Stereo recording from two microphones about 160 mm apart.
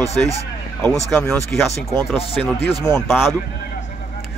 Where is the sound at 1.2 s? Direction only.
Centre (ahead or behind).